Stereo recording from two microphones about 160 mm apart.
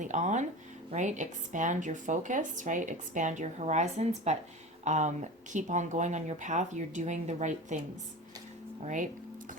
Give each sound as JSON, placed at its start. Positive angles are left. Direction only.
{"t": 0.0, "sound": "speech", "side_deg": -50}
{"t": 8.8, "sound": "speech", "side_deg": -50}